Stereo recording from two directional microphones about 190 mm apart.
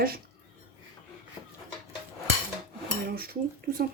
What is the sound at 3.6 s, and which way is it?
Speech, 50° right (ahead or behind).